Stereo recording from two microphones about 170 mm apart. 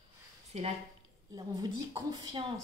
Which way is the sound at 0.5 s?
40° right (ahead or behind).